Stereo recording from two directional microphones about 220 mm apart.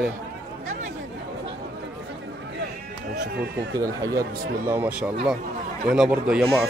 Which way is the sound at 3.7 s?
15° right (ahead or behind).